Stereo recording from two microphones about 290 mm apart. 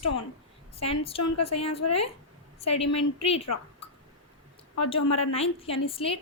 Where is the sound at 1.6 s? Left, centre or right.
Left.